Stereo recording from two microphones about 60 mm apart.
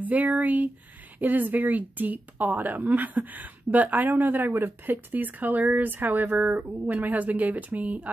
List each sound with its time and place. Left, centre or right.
0.0 s a woman's voice: right